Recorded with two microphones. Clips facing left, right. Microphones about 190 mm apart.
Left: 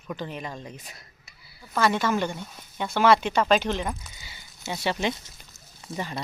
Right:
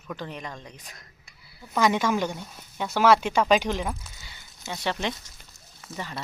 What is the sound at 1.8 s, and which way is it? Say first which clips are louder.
Speech: right 1 dB; 15° right (ahead or behind).